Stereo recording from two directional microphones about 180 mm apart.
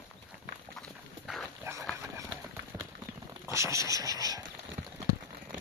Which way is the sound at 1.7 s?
15° right (ahead or behind).